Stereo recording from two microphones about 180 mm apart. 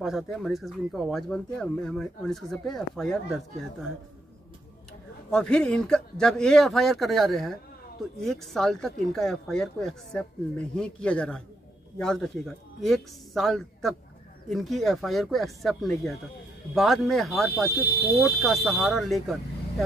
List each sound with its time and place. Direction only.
0.0 s speech: centre (ahead or behind)
5.3 s speech: 5° left (ahead or behind)
17.6 s speech: 60° left (ahead or behind)
18.4 s speech: centre (ahead or behind)